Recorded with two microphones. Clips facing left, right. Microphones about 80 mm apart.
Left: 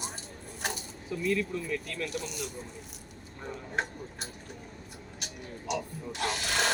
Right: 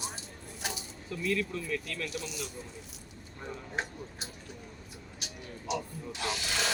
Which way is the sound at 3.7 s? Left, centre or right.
Left.